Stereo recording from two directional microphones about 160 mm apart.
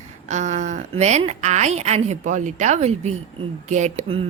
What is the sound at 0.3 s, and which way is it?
A woman's voice, 45° right (ahead or behind).